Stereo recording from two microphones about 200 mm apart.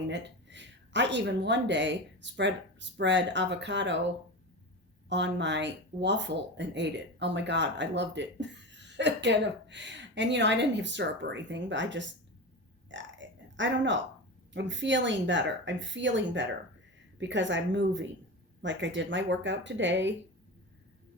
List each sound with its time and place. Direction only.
0.1 s speech: 60° right (ahead or behind)
5.0 s speech: 60° right (ahead or behind)
12.9 s a sound: 65° right (ahead or behind)
14.5 s speech: 65° right (ahead or behind)